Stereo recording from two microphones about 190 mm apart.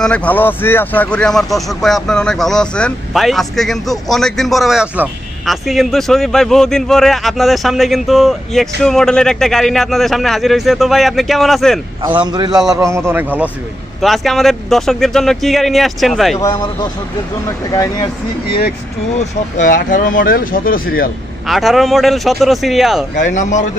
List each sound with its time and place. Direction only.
0.0 s speech: 5° left (ahead or behind)
12.2 s a man's voice: 20° right (ahead or behind)
14.0 s speech: centre (ahead or behind)
16.3 s speech: 15° left (ahead or behind)
19.1 s speech: 40° left (ahead or behind)
21.5 s speech: centre (ahead or behind)
23.1 s speech: 40° left (ahead or behind)